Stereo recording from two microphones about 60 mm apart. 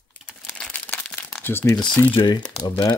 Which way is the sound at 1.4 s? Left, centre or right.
Left.